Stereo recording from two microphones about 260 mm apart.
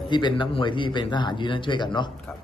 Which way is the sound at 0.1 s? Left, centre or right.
Centre.